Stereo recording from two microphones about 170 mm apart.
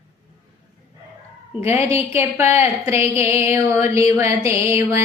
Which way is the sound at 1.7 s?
15° right (ahead or behind).